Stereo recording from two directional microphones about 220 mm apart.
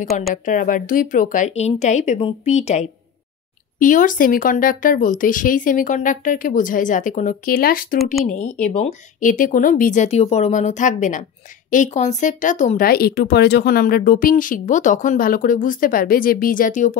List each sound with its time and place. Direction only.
0.3 s speech: 35° left (ahead or behind)
8.0 s speech: centre (ahead or behind)
8.7 s speech: 35° left (ahead or behind)